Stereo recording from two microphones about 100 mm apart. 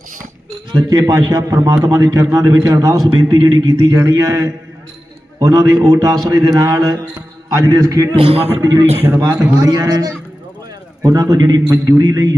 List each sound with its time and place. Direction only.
0.7 s a man's voice: 40° right (ahead or behind)
3.1 s a man's voice: 45° right (ahead or behind)
8.1 s a man's voice: 70° right (ahead or behind)
8.6 s a man's voice: 40° right (ahead or behind)
9.0 s a man's voice: 30° right (ahead or behind)
11.7 s a man's voice: 30° right (ahead or behind)